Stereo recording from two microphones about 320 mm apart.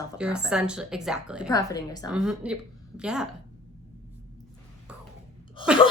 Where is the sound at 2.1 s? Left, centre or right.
Centre.